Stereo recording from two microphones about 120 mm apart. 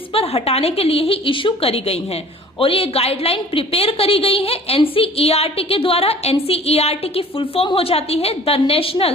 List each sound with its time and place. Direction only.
0.1 s a woman's voice: 55° left (ahead or behind)